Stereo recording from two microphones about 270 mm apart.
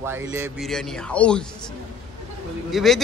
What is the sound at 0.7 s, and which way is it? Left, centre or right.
Speech, centre.